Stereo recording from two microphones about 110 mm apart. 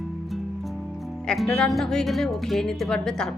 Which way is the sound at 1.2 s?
5° left (ahead or behind).